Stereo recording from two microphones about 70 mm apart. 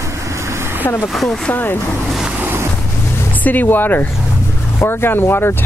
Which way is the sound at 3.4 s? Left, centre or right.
Left.